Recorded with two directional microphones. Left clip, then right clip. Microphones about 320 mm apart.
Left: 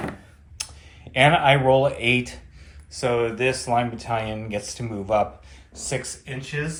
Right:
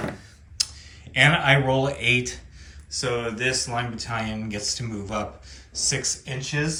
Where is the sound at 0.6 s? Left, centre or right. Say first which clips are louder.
Right 8 dB; centre.